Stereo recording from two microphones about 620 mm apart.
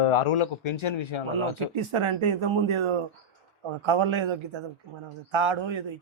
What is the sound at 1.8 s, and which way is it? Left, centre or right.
A man's voice, right.